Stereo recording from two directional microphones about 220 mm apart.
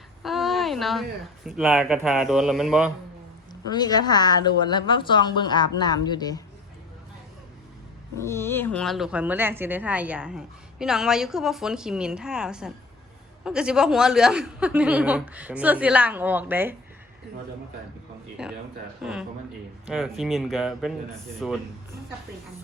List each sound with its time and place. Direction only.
0.2 s a sound: centre (ahead or behind)
1.5 s a woman's voice: centre (ahead or behind)
3.5 s a woman's voice: 20° left (ahead or behind)
8.2 s a woman's voice: 10° left (ahead or behind); by 16.7 s 10° right (ahead or behind)
18.4 s a woman's voice: 5° right (ahead or behind)
19.9 s a woman's voice: centre (ahead or behind)